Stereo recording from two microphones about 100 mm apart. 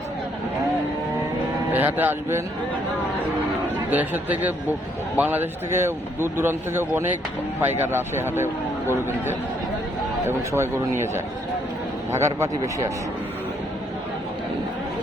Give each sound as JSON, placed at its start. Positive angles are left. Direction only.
{"t": 1.7, "sound": "speech", "side_deg": -20}
{"t": 3.8, "sound": "speech", "side_deg": -15}